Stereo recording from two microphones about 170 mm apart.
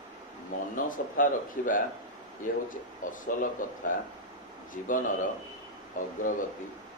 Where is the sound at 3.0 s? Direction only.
50° left (ahead or behind).